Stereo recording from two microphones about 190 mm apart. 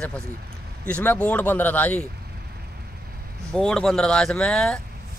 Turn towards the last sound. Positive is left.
turn(degrees=5)  # may be behind; listen again after turning